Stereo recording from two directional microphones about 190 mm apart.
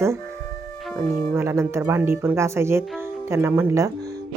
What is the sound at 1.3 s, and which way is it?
Speech, 15° right (ahead or behind).